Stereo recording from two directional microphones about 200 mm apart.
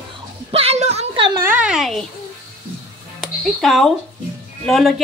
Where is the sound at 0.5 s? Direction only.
30° right (ahead or behind).